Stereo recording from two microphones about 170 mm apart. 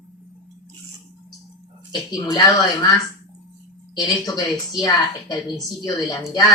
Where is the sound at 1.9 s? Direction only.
25° left (ahead or behind).